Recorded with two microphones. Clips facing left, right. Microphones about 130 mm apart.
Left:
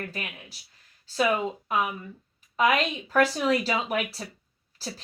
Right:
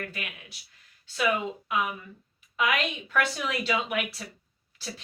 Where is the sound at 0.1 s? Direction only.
35° left (ahead or behind).